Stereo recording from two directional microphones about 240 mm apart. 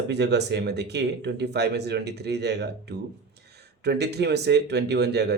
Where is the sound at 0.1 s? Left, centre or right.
Right.